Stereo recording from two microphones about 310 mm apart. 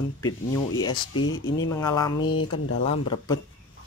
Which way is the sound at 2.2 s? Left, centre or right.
Left.